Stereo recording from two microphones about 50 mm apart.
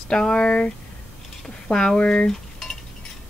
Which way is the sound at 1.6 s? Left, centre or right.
Centre.